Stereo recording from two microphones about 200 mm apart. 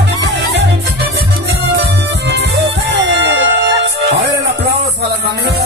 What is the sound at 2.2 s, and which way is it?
Music, 60° right (ahead or behind).